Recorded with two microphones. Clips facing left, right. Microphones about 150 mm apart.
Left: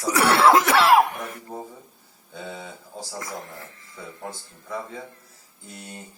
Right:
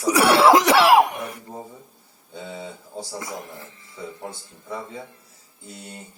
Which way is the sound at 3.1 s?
20° right (ahead or behind).